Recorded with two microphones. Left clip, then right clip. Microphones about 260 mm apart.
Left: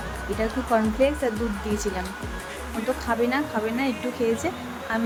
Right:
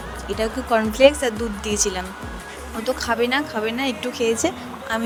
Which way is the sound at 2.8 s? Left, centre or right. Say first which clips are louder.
Right 3 dB; right.